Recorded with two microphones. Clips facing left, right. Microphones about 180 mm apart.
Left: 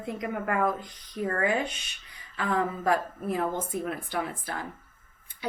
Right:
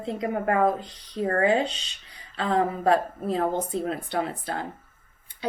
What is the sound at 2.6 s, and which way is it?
A woman's voice, 35° right (ahead or behind).